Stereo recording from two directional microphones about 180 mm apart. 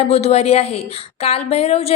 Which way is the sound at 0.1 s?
35° left (ahead or behind).